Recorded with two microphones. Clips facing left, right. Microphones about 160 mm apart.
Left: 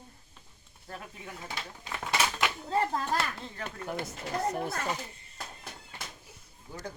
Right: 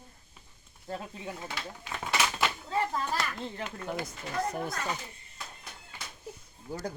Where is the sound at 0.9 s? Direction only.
25° right (ahead or behind).